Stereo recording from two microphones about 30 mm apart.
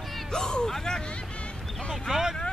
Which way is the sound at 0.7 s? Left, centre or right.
Left.